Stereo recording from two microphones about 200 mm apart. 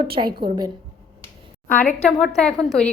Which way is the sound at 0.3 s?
20° right (ahead or behind).